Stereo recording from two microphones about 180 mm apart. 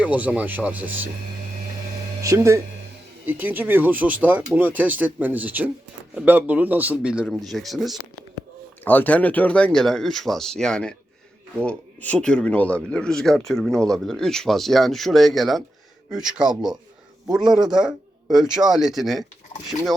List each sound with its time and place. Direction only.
0.0 s speech: 10° right (ahead or behind)
2.2 s speech: 15° right (ahead or behind); by 19.2 s centre (ahead or behind)